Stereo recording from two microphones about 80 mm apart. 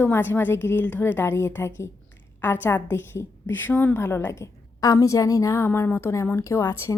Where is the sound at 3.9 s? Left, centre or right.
Left.